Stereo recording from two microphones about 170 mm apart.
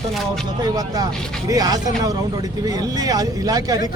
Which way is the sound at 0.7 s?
20° right (ahead or behind).